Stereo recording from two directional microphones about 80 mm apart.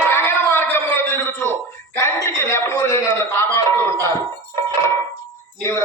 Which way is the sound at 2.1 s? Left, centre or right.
Left.